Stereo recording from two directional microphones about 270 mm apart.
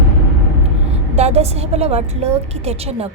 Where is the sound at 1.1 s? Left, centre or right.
Right.